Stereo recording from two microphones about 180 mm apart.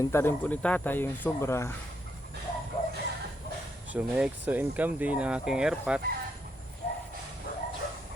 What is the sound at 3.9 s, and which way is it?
Speech, 5° right (ahead or behind).